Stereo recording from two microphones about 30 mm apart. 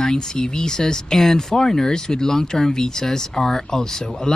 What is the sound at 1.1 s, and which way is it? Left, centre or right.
Speech, centre.